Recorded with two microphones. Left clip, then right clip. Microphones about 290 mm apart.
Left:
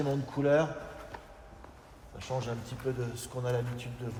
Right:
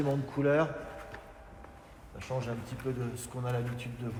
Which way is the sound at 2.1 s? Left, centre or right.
Left.